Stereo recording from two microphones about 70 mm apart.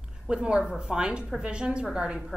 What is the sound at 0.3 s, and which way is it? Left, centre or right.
A woman's voice, centre.